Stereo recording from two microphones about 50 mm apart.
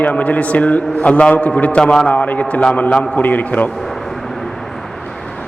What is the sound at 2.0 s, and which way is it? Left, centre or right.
A man's voice, left.